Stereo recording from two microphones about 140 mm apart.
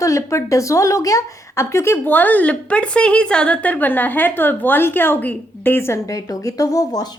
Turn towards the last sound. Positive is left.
turn(degrees=25)  # may be behind; listen again after turning